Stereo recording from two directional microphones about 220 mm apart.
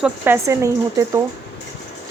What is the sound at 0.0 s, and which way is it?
A woman's voice, 10° right (ahead or behind).